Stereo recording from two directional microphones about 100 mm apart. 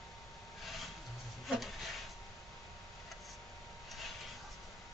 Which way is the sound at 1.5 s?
Centre (ahead or behind).